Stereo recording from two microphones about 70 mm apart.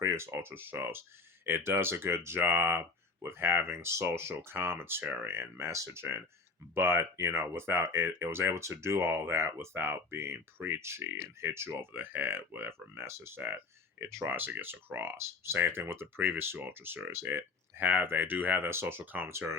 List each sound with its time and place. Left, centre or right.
0.0 s speech: right
19.3 s speech: right